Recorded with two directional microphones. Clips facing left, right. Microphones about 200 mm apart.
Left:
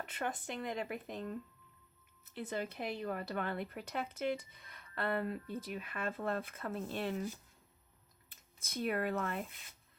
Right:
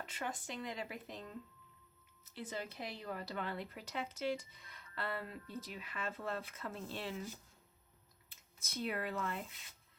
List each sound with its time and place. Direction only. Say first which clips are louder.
0.0 s speech: left 4 dB; 60° left (ahead or behind)
8.3 s speech: left 3 dB; 50° left (ahead or behind)